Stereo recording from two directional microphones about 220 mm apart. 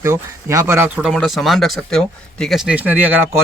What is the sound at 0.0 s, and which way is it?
Speech, 15° right (ahead or behind).